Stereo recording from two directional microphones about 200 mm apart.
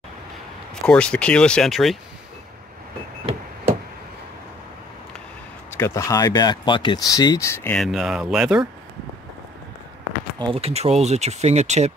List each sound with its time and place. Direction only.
0.8 s speech: 5° left (ahead or behind)
5.7 s speech: 15° left (ahead or behind); by 8.6 s 5° right (ahead or behind)
10.4 s speech: 30° right (ahead or behind)